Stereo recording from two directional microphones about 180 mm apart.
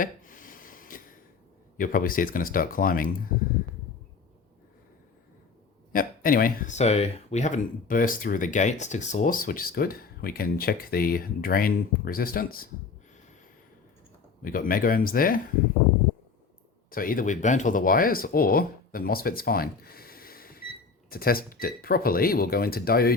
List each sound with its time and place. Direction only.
0.0 s a sound: 50° left (ahead or behind)
1.8 s speech: 50° left (ahead or behind)
5.9 s speech: 50° left (ahead or behind)
14.4 s speech: 50° left (ahead or behind)
16.9 s speech: 50° left (ahead or behind)